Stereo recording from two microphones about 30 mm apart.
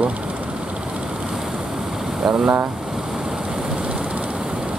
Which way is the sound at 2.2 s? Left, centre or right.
Centre.